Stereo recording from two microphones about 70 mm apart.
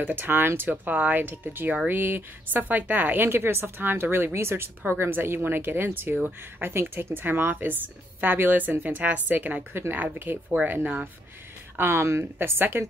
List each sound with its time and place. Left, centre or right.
0.0 s a woman's voice: right
11.7 s a woman's voice: right